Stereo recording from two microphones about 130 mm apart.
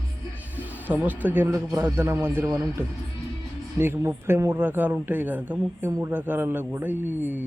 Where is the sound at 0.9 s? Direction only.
10° right (ahead or behind).